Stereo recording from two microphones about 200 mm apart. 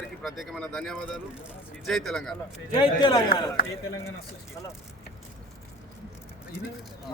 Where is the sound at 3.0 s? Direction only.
25° left (ahead or behind).